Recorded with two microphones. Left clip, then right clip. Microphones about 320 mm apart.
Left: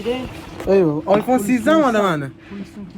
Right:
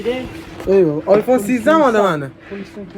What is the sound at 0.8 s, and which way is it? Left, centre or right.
Speech, centre.